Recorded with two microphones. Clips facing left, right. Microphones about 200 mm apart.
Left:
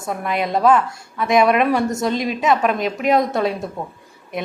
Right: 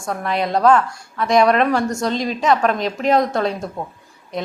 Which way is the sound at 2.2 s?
5° left (ahead or behind).